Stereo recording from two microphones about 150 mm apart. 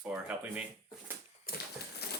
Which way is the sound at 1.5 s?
80° left.